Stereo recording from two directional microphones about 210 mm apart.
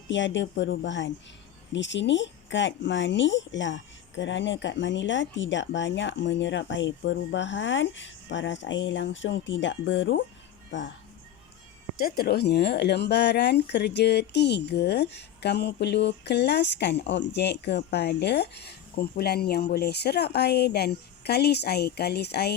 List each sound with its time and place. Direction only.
0.1 s speech: 60° left (ahead or behind)
11.9 s speech: 45° left (ahead or behind)